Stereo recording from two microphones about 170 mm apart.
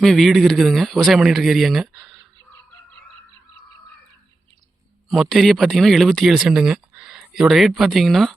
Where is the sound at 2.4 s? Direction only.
15° left (ahead or behind).